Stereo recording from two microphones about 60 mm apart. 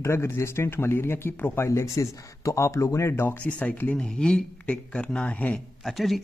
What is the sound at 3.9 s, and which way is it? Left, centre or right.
Speech, centre.